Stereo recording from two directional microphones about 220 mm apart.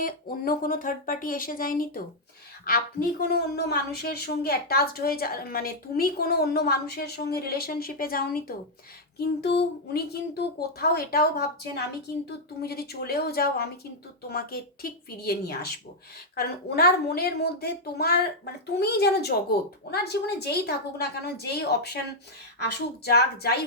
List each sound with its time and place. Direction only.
0.0 s a woman's voice: 40° left (ahead or behind)
12.6 s a woman's voice: 45° left (ahead or behind)